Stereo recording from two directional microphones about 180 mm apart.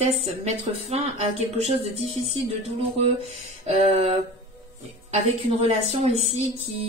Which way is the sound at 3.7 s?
35° right (ahead or behind).